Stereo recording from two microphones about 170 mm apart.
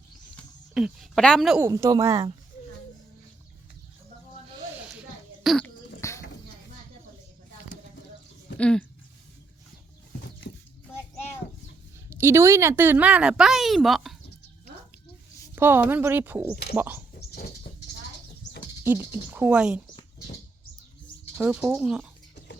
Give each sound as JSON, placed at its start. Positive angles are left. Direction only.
{"t": 0.7, "sound": "a woman's voice", "side_deg": -5}
{"t": 1.6, "sound": "a woman's voice", "side_deg": -20}
{"t": 5.4, "sound": "cough", "side_deg": 0}
{"t": 6.0, "sound": "a sound", "side_deg": 15}
{"t": 8.5, "sound": "speech", "side_deg": 5}
{"t": 12.1, "sound": "speech", "side_deg": -15}
{"t": 15.5, "sound": "speech", "side_deg": -10}
{"t": 17.2, "sound": "dog", "side_deg": 70}
{"t": 18.9, "sound": "speech", "side_deg": -15}
{"t": 21.3, "sound": "speech", "side_deg": -5}